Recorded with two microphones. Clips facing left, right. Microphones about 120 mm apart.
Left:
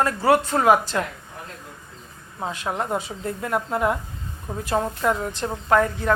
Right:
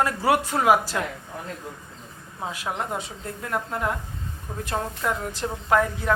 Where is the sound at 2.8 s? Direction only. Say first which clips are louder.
Left 4 dB; centre (ahead or behind).